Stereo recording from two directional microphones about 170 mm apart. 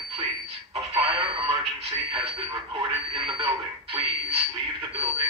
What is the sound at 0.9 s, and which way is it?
Speech, 35° right (ahead or behind).